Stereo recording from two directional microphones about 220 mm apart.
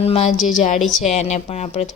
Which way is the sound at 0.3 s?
Centre (ahead or behind).